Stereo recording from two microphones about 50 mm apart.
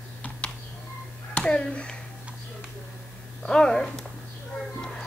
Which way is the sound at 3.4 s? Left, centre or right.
Centre.